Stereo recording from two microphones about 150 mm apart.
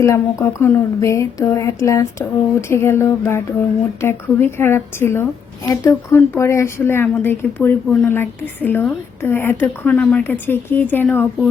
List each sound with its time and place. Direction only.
0.0 s a woman's voice: 20° left (ahead or behind)